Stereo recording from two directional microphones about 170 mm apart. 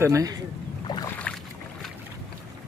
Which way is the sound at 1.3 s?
5° left (ahead or behind).